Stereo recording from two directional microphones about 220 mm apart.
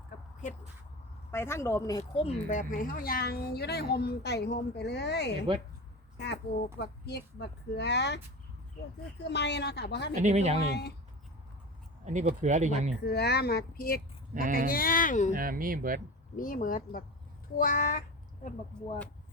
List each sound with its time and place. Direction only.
1.3 s a woman's voice: 10° left (ahead or behind); by 5.3 s 50° left (ahead or behind)
6.1 s a sound: 50° left (ahead or behind)
6.7 s a woman's voice: 50° left (ahead or behind)
9.2 s a woman's voice: 50° left (ahead or behind)
10.2 s speech: 30° right (ahead or behind)
10.7 s a woman's voice: 50° left (ahead or behind)
12.0 s speech: 35° right (ahead or behind)
13.1 s a woman's voice: 45° left (ahead or behind)
15.3 s speech: 40° right (ahead or behind)
16.3 s speech: 35° left (ahead or behind)